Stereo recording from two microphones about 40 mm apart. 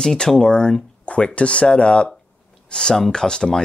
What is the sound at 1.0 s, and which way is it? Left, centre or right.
Speech, left.